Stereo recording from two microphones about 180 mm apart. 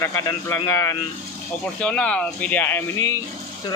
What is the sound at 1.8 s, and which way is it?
Speech, 5° left (ahead or behind).